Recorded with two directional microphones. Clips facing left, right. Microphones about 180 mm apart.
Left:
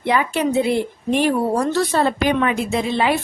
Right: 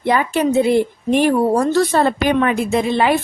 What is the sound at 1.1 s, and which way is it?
A woman's voice, 45° right (ahead or behind).